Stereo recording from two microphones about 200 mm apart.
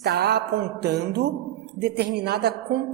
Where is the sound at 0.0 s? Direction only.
55° right (ahead or behind).